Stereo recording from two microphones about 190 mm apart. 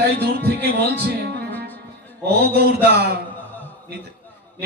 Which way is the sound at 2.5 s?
55° right (ahead or behind).